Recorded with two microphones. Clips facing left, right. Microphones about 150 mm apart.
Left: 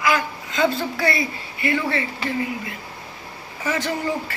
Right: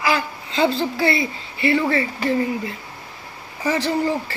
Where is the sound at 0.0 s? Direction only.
30° right (ahead or behind).